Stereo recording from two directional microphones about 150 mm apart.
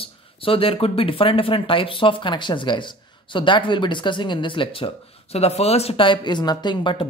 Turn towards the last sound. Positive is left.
turn(degrees=35)  # may be behind; listen again after turning